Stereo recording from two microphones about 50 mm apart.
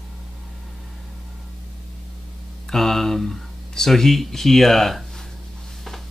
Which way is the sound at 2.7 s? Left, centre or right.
Centre.